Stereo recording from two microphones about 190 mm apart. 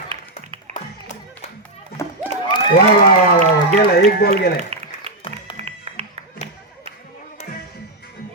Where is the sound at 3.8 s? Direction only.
55° left (ahead or behind).